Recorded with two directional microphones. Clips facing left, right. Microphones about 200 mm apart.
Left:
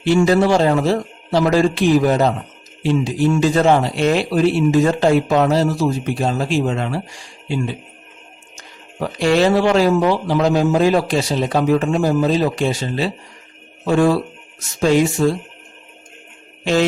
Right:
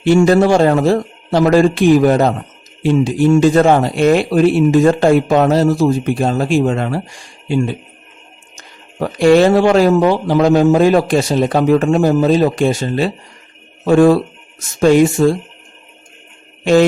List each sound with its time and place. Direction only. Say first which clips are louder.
0.0 s speech: right 4 dB; 50° right (ahead or behind)